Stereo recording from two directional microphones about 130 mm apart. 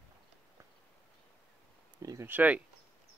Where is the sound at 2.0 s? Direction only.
25° right (ahead or behind).